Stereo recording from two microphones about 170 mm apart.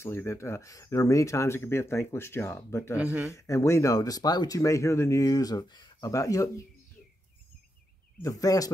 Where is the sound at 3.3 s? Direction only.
15° left (ahead or behind).